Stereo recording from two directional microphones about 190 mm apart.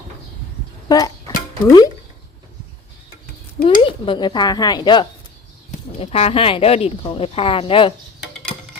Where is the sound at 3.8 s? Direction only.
25° left (ahead or behind).